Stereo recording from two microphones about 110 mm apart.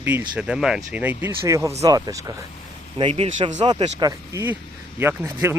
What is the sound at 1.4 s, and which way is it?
Speech, 30° right (ahead or behind).